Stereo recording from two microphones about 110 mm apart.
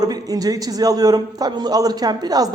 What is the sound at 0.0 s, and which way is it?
A man's voice, 35° right (ahead or behind).